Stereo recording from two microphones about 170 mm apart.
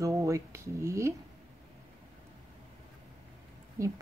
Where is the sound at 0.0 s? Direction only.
20° right (ahead or behind).